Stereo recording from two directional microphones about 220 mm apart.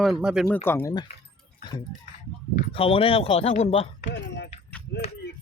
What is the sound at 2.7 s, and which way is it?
Speech, 25° left (ahead or behind).